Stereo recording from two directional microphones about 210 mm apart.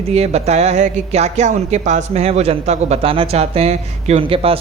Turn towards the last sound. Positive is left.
turn(degrees=-25)  # may be behind; listen again after turning